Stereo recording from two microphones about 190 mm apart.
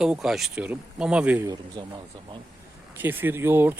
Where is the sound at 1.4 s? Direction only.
20° right (ahead or behind).